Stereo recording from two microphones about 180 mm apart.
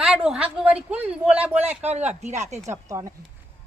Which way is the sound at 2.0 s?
40° right (ahead or behind).